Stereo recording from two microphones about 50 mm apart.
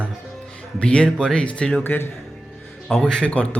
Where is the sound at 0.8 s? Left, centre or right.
Centre.